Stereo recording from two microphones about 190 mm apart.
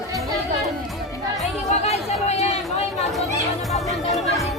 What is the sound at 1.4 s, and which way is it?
Speech, 35° left (ahead or behind).